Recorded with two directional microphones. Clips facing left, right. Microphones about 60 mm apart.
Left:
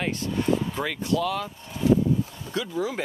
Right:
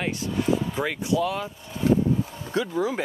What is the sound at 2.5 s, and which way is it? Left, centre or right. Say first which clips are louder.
Speech: right 4 dB; right.